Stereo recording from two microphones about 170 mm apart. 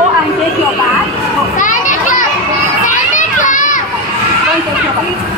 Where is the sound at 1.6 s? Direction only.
50° left (ahead or behind).